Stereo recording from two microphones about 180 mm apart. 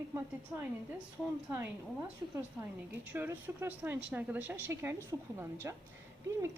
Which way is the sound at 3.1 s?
10° right (ahead or behind).